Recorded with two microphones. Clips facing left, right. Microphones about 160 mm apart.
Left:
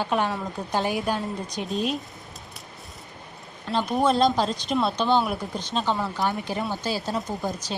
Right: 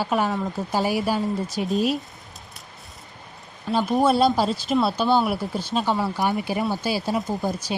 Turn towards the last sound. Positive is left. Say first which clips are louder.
# right 3 dB
turn(degrees=-10)  # may be behind; listen again after turning